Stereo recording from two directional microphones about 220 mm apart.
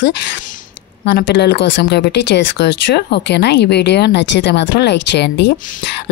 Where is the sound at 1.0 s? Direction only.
50° left (ahead or behind).